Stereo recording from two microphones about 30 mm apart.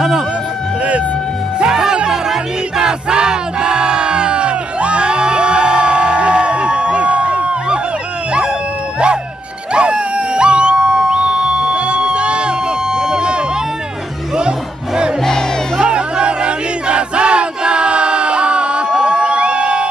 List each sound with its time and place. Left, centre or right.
1.7 s music: right
2.8 s crowd: right
9.7 s music: right
12.9 s a sound: right
15.8 s battle cry: right
19.0 s music: right